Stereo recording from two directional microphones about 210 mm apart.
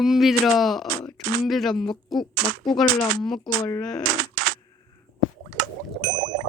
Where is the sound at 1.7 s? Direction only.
20° left (ahead or behind).